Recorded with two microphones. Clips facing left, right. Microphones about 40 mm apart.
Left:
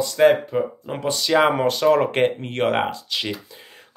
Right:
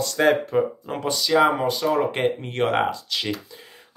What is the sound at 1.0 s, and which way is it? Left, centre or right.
Speech, left.